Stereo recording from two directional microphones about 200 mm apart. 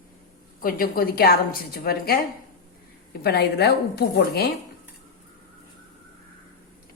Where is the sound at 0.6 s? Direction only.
45° left (ahead or behind).